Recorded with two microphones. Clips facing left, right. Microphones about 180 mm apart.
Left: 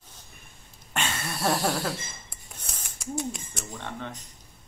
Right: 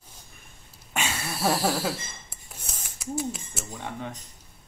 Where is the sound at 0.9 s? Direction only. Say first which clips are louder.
Even; 5° right (ahead or behind).